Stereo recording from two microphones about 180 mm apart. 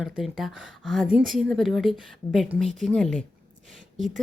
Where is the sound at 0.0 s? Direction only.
Centre (ahead or behind).